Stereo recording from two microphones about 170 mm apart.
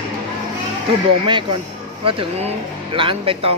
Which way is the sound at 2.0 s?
30° right (ahead or behind).